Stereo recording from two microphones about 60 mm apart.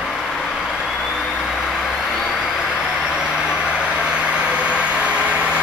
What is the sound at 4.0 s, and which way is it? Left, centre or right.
Vehicle, centre.